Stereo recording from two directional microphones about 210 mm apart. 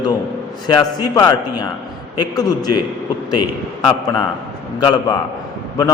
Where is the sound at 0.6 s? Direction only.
20° left (ahead or behind).